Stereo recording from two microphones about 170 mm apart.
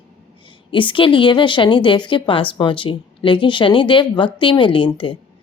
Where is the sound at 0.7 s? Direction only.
30° left (ahead or behind).